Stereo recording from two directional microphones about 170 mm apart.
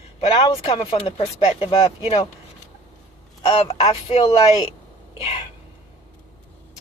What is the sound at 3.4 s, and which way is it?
Speech, 35° left (ahead or behind).